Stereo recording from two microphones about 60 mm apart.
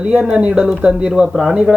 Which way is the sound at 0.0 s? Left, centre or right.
Centre.